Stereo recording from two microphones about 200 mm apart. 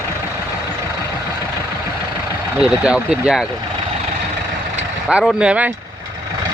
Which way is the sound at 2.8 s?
5° right (ahead or behind).